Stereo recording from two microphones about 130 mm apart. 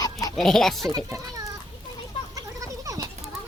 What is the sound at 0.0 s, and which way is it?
Chicken, 30° left (ahead or behind).